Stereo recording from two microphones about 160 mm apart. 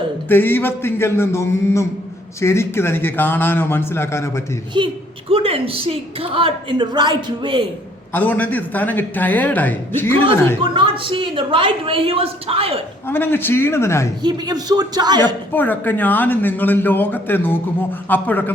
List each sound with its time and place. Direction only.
0.3 s a man's voice: 15° left (ahead or behind)
4.7 s a woman's voice: 30° right (ahead or behind)
8.1 s a man's voice: 10° left (ahead or behind)
10.6 s a woman's voice: 30° right (ahead or behind)
13.1 s a man's voice: 15° left (ahead or behind)
14.2 s speech: 25° right (ahead or behind)
15.5 s a man's voice: 10° left (ahead or behind)